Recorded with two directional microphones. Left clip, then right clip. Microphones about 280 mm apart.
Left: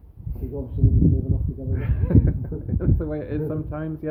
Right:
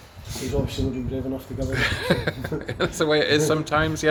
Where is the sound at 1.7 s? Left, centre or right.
Centre.